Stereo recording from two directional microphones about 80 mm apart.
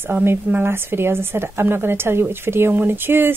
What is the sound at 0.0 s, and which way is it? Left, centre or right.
A woman's voice, right.